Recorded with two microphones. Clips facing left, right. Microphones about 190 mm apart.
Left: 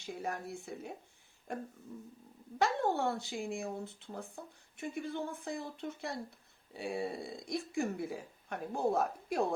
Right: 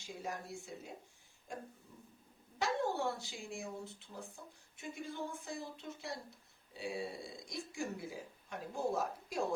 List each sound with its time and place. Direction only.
0.0 s speech: 60° left (ahead or behind)
2.6 s speech: 60° left (ahead or behind)